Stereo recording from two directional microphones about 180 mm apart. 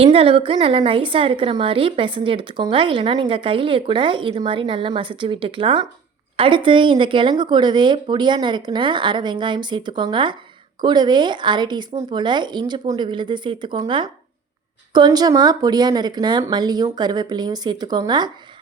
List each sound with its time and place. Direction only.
0.0 s a woman's voice: 30° right (ahead or behind)